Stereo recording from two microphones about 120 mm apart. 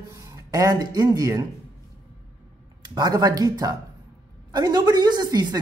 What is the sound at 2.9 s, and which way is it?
Speech, 35° right (ahead or behind).